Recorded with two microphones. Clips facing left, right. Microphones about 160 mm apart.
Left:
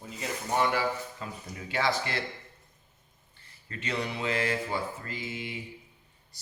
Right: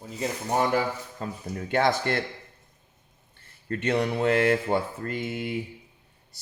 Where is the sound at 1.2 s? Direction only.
50° right (ahead or behind).